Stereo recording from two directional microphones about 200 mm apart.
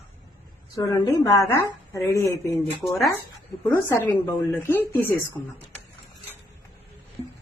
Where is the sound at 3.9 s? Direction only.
15° left (ahead or behind).